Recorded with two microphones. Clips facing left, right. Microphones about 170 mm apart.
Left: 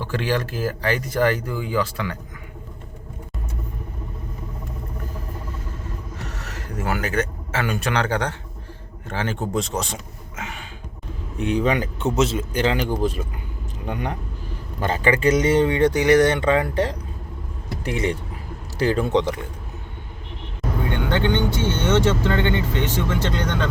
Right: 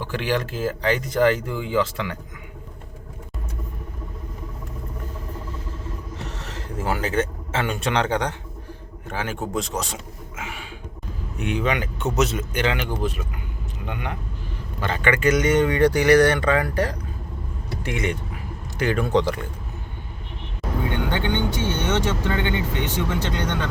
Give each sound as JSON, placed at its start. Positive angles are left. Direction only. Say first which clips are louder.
{"t": 0.0, "sound": "speech", "louder": "left 1 dB", "side_deg": -15}
{"t": 6.1, "sound": "speech", "louder": "even", "side_deg": -25}
{"t": 11.3, "sound": "a man's voice", "louder": "left 3 dB", "side_deg": 35}
{"t": 21.1, "sound": "speech", "louder": "left 3 dB", "side_deg": -15}